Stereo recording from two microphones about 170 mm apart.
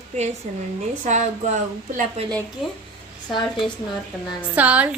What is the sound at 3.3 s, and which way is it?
Speech, 25° left (ahead or behind).